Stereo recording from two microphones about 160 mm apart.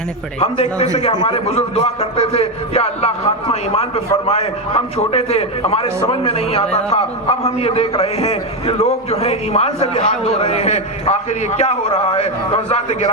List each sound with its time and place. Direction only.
0.3 s a man's voice: 45° left (ahead or behind)